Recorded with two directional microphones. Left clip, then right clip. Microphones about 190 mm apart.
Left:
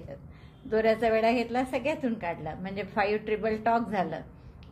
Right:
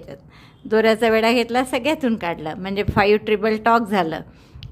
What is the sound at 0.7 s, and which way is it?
A woman's voice, 45° right (ahead or behind).